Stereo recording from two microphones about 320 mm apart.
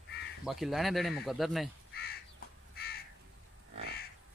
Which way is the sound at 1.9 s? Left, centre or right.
Left.